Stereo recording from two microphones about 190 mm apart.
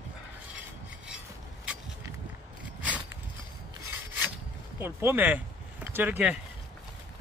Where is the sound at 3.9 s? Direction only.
10° right (ahead or behind).